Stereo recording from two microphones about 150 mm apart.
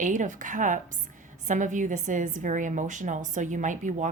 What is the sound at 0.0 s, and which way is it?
A woman's voice, 55° right (ahead or behind).